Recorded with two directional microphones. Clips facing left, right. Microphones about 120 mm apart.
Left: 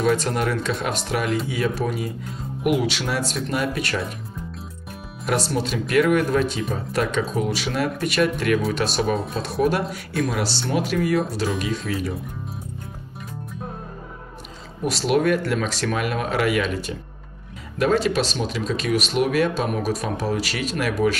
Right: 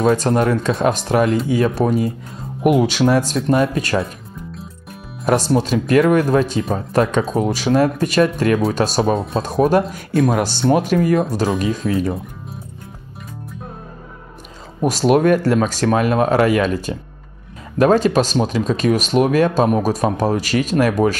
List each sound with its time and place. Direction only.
0.0 s speech: 40° right (ahead or behind)
5.2 s speech: 40° right (ahead or behind)
14.8 s speech: 45° right (ahead or behind)